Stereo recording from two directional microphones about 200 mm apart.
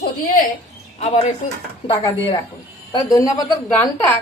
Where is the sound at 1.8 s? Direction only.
25° left (ahead or behind).